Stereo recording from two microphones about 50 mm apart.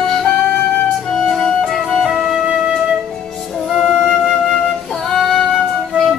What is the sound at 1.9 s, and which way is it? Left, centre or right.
Flute, centre.